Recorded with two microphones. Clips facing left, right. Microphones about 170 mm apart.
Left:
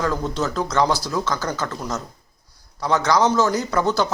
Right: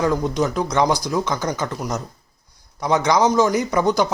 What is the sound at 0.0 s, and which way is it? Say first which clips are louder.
Speech: right 4 dB; 15° right (ahead or behind).